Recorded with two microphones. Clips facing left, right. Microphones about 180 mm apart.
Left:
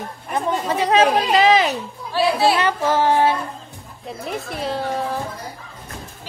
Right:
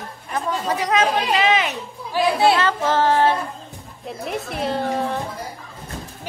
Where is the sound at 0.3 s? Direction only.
25° left (ahead or behind).